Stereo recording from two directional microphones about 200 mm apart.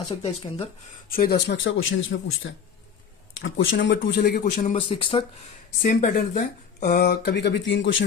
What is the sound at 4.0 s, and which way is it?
Speech, 50° left (ahead or behind).